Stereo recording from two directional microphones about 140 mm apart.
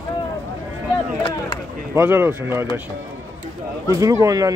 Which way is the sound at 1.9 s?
15° right (ahead or behind).